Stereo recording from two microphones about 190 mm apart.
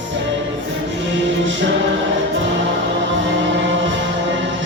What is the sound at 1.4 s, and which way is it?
Music, 75° right (ahead or behind).